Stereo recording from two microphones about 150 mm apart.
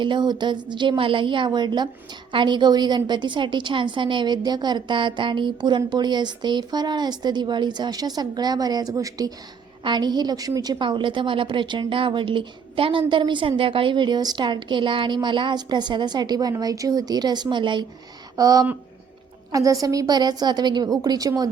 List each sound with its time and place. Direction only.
0.0 s a woman's voice: 30° right (ahead or behind)